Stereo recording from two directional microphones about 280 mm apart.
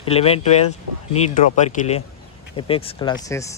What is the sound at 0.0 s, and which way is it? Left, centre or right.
Speech, left.